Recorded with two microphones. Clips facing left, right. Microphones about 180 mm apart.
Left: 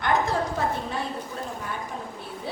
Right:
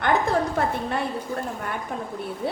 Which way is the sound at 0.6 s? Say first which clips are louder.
Right 3 dB; 60° right (ahead or behind).